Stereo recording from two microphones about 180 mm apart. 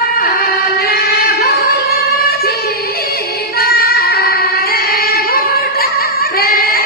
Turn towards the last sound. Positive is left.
turn(degrees=55)  # may be behind; listen again after turning